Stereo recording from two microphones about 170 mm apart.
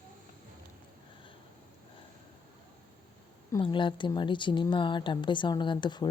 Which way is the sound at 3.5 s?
30° left (ahead or behind).